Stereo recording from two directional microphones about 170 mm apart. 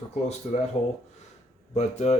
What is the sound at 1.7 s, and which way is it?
Speech, 40° left (ahead or behind).